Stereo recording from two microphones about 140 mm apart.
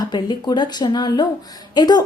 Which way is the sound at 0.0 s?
30° left (ahead or behind).